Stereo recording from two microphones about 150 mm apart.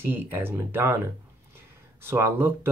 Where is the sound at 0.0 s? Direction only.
15° right (ahead or behind).